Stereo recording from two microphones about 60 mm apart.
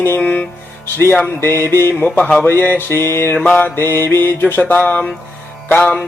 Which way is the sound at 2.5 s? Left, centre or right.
Left.